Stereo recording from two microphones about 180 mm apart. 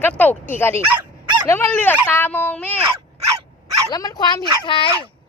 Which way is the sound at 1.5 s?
10° left (ahead or behind).